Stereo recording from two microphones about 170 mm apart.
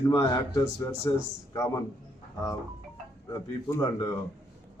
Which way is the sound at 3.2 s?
20° left (ahead or behind).